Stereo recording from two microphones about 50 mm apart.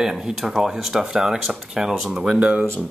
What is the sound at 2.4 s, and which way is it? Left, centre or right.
Speech, right.